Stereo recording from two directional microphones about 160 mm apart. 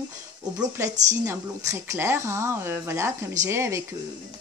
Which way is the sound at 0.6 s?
20° right (ahead or behind).